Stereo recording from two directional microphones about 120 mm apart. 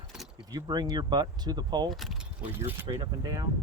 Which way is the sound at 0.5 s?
35° right (ahead or behind).